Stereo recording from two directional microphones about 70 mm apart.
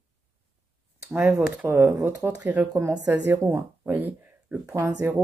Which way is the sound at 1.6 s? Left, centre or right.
Right.